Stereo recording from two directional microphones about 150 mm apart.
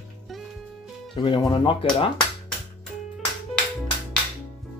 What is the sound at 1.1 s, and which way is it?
Speech, 30° left (ahead or behind).